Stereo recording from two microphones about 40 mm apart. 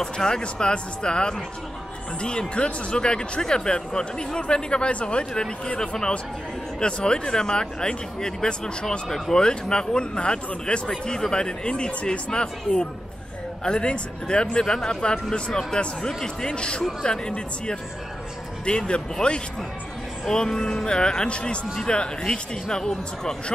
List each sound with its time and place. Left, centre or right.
0.0 s speech: centre
16.4 s speech: left
18.7 s speech: left
20.2 s speech: centre